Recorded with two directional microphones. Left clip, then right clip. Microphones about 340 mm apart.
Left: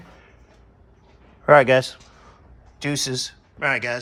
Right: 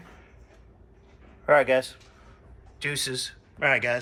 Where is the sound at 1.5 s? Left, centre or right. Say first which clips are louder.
Left 6 dB; left.